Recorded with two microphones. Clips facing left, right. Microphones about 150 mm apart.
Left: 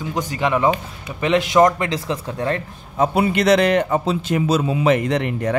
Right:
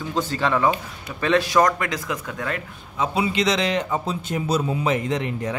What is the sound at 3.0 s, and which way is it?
A man's voice, 60° left (ahead or behind).